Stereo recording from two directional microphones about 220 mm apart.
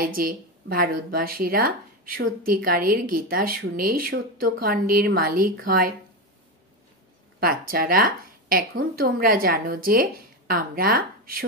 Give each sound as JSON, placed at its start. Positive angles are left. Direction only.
{"t": 0.0, "sound": "speech", "side_deg": -40}
{"t": 7.3, "sound": "speech", "side_deg": -40}